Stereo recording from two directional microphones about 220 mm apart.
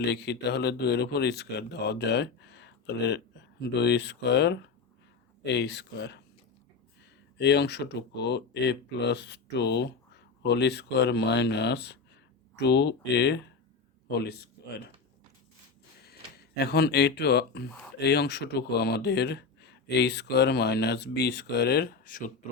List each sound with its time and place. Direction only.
0.0 s speech: 50° left (ahead or behind)
7.3 s speech: 50° left (ahead or behind)
16.6 s speech: 45° left (ahead or behind)